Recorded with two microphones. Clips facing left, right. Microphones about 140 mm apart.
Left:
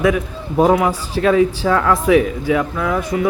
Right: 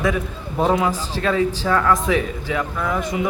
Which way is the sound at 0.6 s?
10° left (ahead or behind).